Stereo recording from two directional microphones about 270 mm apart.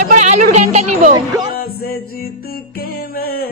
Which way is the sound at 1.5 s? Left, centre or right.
Left.